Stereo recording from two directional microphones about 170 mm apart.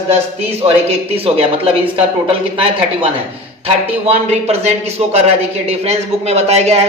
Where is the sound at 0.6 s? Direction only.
35° right (ahead or behind).